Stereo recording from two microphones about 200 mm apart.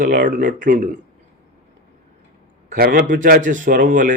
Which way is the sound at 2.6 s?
45° right (ahead or behind).